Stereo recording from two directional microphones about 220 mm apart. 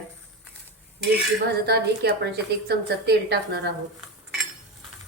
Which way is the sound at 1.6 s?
45° right (ahead or behind).